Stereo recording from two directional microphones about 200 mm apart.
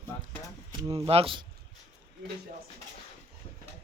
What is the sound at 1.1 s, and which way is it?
Speech, 30° right (ahead or behind).